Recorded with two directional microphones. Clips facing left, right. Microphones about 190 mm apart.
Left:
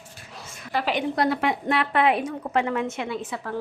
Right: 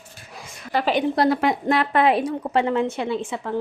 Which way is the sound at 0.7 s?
40° right (ahead or behind).